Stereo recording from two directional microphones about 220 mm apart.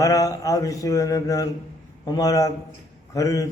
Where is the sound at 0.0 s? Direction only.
15° left (ahead or behind).